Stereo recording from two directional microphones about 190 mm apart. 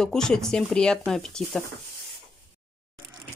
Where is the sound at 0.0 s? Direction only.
5° left (ahead or behind).